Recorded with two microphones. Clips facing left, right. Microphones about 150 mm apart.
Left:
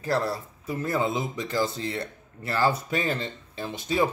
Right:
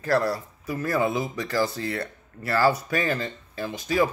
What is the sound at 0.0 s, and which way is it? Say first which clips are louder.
Speech: right 3 dB; 25° left (ahead or behind).